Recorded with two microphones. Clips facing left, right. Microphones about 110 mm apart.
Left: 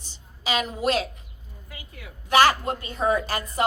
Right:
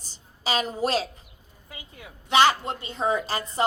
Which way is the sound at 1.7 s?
25° right (ahead or behind).